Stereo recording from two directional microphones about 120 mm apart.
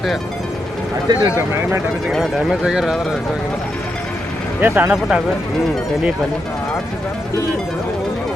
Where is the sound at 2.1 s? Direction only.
Centre (ahead or behind).